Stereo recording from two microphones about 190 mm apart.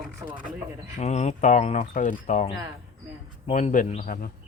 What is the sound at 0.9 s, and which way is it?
Speech, 35° left (ahead or behind).